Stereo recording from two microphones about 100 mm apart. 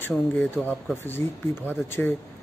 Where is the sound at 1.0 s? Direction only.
20° left (ahead or behind).